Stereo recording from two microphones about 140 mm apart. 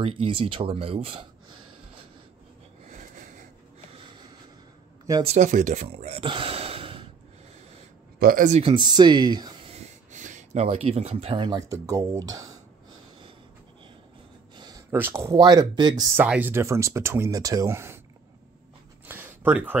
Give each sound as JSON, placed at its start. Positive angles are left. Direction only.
{"t": 0.0, "sound": "speech", "side_deg": -40}
{"t": 2.9, "sound": "a sound", "side_deg": -65}
{"t": 5.2, "sound": "speech", "side_deg": -55}
{"t": 6.2, "sound": "gasp", "side_deg": -40}
{"t": 8.2, "sound": "speech", "side_deg": -90}
{"t": 8.6, "sound": "speech", "side_deg": -30}
{"t": 10.1, "sound": "speech", "side_deg": -55}
{"t": 11.4, "sound": "speech", "side_deg": -25}
{"t": 14.9, "sound": "speech", "side_deg": -15}
{"t": 16.2, "sound": "speech", "side_deg": -10}
{"t": 19.0, "sound": "a sound", "side_deg": -15}